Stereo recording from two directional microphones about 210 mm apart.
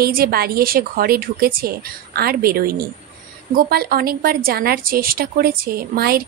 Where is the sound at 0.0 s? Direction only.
45° right (ahead or behind).